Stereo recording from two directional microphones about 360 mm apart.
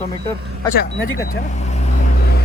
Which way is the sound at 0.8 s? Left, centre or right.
Left.